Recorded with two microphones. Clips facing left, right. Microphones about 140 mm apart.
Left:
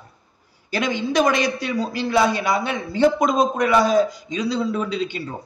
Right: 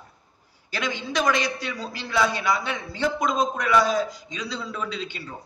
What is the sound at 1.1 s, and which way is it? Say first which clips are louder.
A man's voice: left 4 dB; 50° left (ahead or behind).